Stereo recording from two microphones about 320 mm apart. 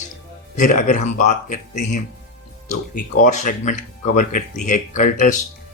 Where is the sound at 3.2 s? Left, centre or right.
Left.